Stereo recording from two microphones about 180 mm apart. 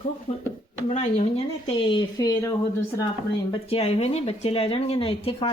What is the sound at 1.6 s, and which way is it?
Speech, 30° left (ahead or behind).